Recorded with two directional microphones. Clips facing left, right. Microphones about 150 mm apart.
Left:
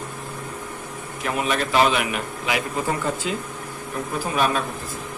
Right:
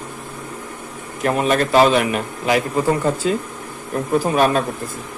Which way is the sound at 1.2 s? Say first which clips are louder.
Right 7 dB; 45° right (ahead or behind).